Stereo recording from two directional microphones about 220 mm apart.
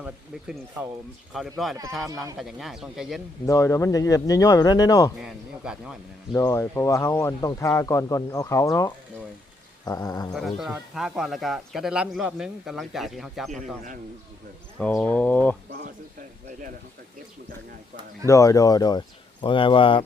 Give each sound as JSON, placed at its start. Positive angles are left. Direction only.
{"t": 0.0, "sound": "a man's voice", "side_deg": -5}
{"t": 3.4, "sound": "speech", "side_deg": 15}
{"t": 5.2, "sound": "a man's voice", "side_deg": -5}
{"t": 6.3, "sound": "speech", "side_deg": 15}
{"t": 10.3, "sound": "a man's voice", "side_deg": 0}
{"t": 14.8, "sound": "speech", "side_deg": 5}
{"t": 18.3, "sound": "speech", "side_deg": 15}